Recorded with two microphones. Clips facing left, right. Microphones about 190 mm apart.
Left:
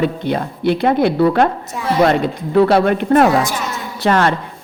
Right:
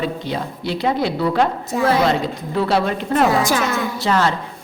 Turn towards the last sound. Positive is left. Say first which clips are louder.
# left 3 dB
turn(degrees=60)  # may be behind; listen again after turning